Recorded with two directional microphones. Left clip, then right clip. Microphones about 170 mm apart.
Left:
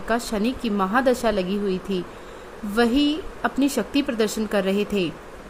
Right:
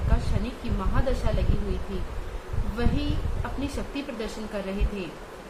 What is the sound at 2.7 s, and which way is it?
A woman's voice, 60° left (ahead or behind).